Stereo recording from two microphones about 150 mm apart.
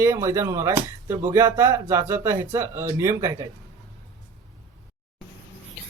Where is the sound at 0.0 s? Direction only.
20° right (ahead or behind).